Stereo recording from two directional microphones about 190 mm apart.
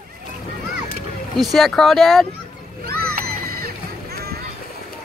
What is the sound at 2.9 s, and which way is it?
Music, 55° right (ahead or behind).